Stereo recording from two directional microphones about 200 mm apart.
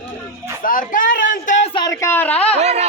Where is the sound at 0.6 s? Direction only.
45° left (ahead or behind).